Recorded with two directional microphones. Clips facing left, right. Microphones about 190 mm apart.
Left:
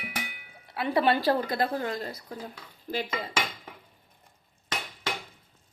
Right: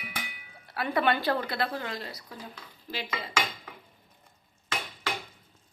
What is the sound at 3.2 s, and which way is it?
Dishes, 45° left (ahead or behind).